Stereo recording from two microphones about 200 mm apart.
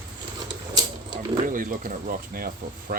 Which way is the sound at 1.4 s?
45° right (ahead or behind).